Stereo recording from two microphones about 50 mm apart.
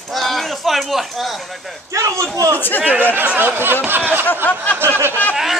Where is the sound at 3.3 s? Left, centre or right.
Right.